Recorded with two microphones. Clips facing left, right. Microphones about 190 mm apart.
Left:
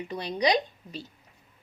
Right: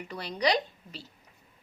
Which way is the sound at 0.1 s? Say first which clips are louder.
Left 2 dB; 20° left (ahead or behind).